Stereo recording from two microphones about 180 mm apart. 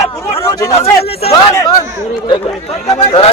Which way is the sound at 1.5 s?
20° left (ahead or behind).